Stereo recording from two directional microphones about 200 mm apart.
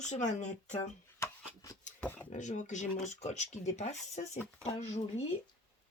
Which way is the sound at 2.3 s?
40° left (ahead or behind).